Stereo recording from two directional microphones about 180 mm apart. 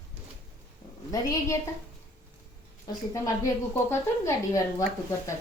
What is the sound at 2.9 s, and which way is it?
A woman's voice, 20° left (ahead or behind).